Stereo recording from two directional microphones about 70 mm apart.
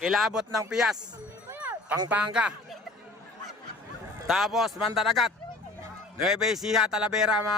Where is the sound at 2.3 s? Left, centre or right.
Centre.